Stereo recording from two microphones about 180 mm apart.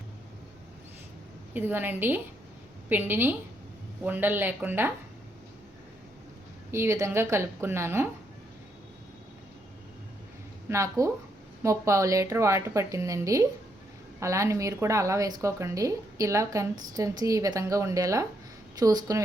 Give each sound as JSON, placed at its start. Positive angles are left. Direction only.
{"t": 1.5, "sound": "a woman's voice", "side_deg": -10}
{"t": 6.7, "sound": "a woman's voice", "side_deg": -15}
{"t": 10.7, "sound": "a woman's voice", "side_deg": -15}